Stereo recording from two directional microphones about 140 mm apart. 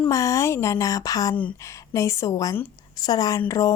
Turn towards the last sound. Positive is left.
turn(degrees=20)  # may be behind; listen again after turning